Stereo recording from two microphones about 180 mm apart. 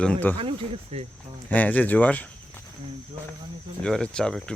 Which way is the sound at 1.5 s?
10° left (ahead or behind).